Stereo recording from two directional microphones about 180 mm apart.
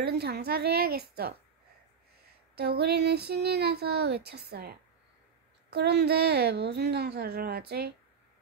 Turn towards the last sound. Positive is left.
turn(degrees=-65)  # may be behind; listen again after turning